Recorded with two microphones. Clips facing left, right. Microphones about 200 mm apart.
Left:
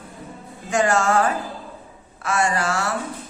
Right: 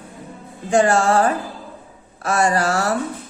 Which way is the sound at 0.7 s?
35° right (ahead or behind).